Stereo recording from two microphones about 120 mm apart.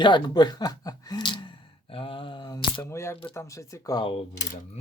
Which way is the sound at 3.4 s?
25° left (ahead or behind).